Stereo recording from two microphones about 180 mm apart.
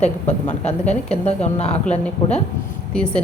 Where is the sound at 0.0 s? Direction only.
40° left (ahead or behind).